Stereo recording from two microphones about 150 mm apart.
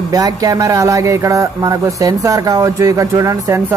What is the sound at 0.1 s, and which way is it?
A man's voice, 20° right (ahead or behind).